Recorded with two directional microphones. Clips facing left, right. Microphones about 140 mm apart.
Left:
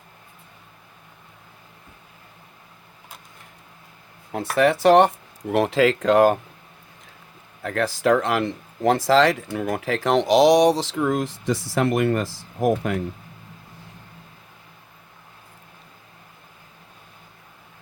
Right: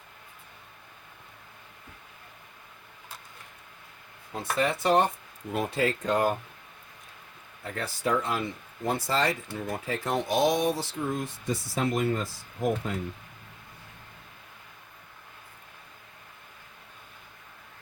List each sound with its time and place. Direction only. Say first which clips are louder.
4.3 s speech: left 8 dB; 70° left (ahead or behind); by 6.3 s 90° left
7.6 s speech: left 9 dB; 90° left